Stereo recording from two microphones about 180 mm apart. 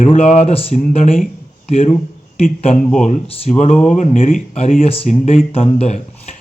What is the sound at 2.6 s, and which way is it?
Speech, 35° left (ahead or behind).